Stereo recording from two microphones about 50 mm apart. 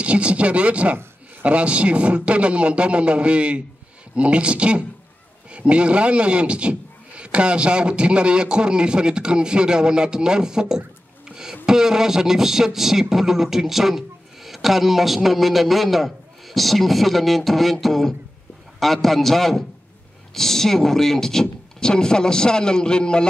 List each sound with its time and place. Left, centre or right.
0.0 s a man's voice: right; by 23.2 s centre